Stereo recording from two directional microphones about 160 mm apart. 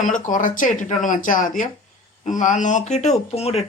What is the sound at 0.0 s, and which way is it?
Speech, 55° left (ahead or behind).